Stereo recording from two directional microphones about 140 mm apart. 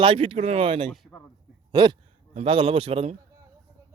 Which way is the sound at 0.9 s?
Centre (ahead or behind).